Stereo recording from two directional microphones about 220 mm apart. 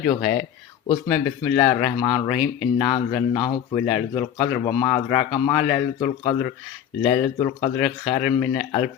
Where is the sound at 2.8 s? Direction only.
20° left (ahead or behind).